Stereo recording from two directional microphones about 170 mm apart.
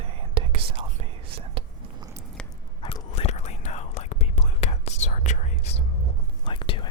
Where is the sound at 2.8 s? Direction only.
30° left (ahead or behind).